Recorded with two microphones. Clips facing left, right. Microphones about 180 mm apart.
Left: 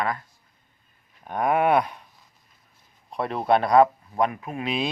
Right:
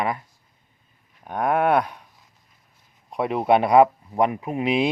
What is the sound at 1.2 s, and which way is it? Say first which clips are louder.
Speech: right 1 dB; 5° left (ahead or behind).